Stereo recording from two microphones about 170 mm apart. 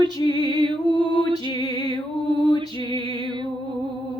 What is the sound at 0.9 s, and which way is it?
Female singing, 30° right (ahead or behind).